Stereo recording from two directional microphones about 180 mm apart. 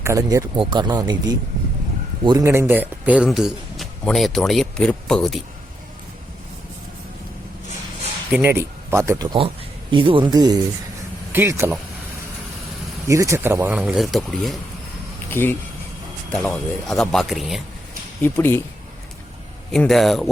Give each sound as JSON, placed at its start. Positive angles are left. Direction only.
{"t": 0.0, "sound": "speech", "side_deg": -20}
{"t": 8.3, "sound": "speech", "side_deg": -10}
{"t": 13.1, "sound": "speech", "side_deg": -15}
{"t": 13.7, "sound": "speech", "side_deg": 0}
{"t": 15.3, "sound": "speech", "side_deg": 10}
{"t": 18.2, "sound": "speech", "side_deg": 10}
{"t": 19.7, "sound": "speech", "side_deg": 0}